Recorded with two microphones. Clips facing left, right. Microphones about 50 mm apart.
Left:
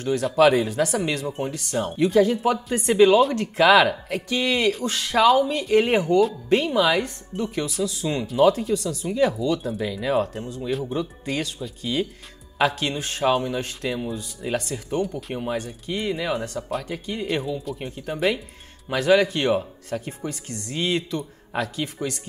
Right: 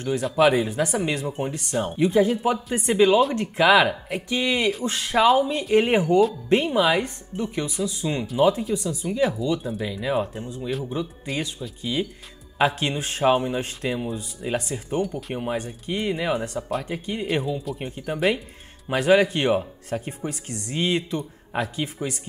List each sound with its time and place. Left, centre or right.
0.2 s speech: centre
4.1 s speech: centre
12.5 s speech: right
15.0 s speech: centre
15.4 s speech: centre
17.3 s speech: centre
18.9 s speech: right